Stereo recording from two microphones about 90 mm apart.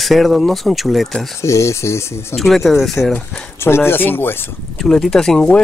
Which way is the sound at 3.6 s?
25° left (ahead or behind).